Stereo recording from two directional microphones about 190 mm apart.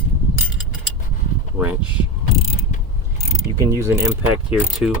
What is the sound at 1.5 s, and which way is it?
Speech, 10° right (ahead or behind).